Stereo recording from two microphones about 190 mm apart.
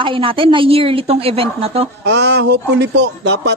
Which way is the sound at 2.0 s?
65° right (ahead or behind).